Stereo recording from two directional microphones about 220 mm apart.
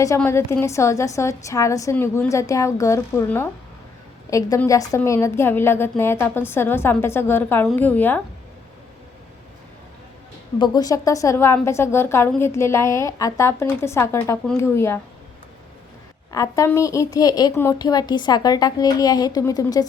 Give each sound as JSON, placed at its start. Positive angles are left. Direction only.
{"t": 0.0, "sound": "speech", "side_deg": 15}
{"t": 10.6, "sound": "speech", "side_deg": 15}
{"t": 16.3, "sound": "speech", "side_deg": 15}